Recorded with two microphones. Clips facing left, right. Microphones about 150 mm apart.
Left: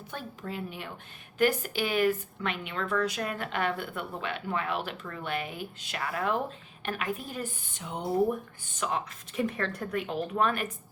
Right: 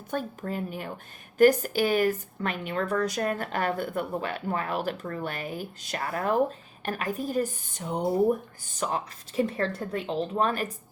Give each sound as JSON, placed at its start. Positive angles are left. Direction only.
{"t": 0.1, "sound": "a woman's voice", "side_deg": -45}